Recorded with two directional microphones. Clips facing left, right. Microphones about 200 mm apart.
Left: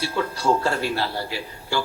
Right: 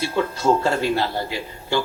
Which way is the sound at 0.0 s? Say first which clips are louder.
Right 3 dB; 20° right (ahead or behind).